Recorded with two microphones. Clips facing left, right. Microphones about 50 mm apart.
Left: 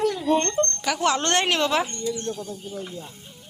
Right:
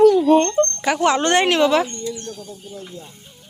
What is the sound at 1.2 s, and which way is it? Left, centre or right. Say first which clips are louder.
Speech: right 6 dB; centre.